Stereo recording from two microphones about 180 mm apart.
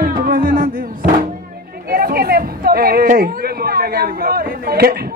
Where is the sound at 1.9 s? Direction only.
55° right (ahead or behind).